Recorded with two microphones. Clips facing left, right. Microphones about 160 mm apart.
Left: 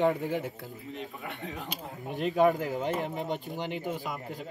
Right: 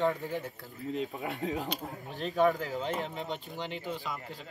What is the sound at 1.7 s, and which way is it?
Speech, 15° left (ahead or behind).